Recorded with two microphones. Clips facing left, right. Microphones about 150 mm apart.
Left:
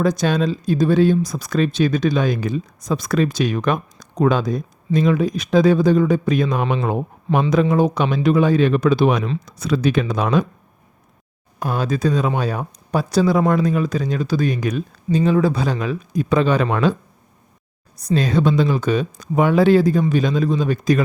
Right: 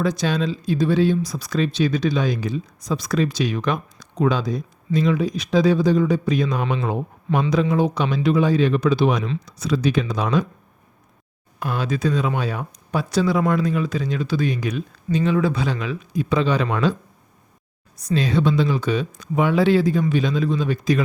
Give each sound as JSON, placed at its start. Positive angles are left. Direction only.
{"t": 0.0, "sound": "speech", "side_deg": 45}
{"t": 9.2, "sound": "speech", "side_deg": 45}
{"t": 11.6, "sound": "speech", "side_deg": 40}
{"t": 18.0, "sound": "speech", "side_deg": 45}